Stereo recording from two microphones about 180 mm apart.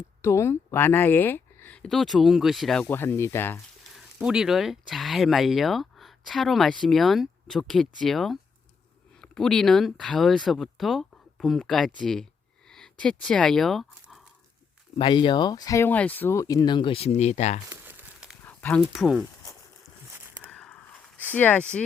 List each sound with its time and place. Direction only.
0.2 s speech: 15° left (ahead or behind)
3.9 s speech: 5° right (ahead or behind)
12.0 s a sound: 5° left (ahead or behind)
14.9 s speech: 30° left (ahead or behind)
17.7 s crumpling: 10° right (ahead or behind)
18.4 s speech: 10° left (ahead or behind)
20.5 s a sound: 5° left (ahead or behind)
21.2 s speech: 10° left (ahead or behind)